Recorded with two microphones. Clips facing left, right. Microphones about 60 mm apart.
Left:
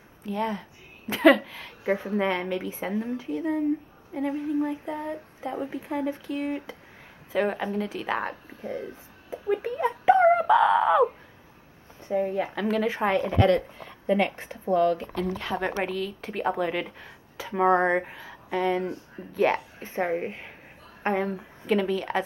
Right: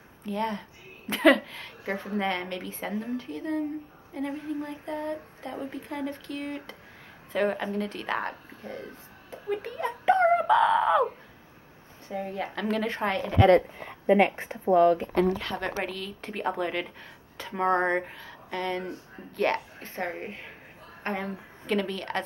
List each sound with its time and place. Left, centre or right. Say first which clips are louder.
0.2 s speech: left 1 dB; centre
9.3 s a sound: left 5 dB; centre
12.1 s speech: left 7 dB; centre
13.5 s a woman's voice: right 4 dB; right
14.3 s speech: right 3 dB; centre
15.3 s speech: left 3 dB; centre